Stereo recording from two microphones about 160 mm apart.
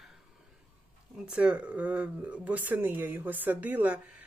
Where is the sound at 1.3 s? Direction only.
5° right (ahead or behind).